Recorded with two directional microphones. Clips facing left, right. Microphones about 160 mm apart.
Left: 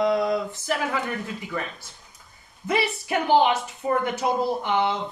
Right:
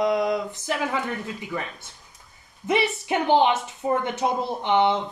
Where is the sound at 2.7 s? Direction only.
20° right (ahead or behind).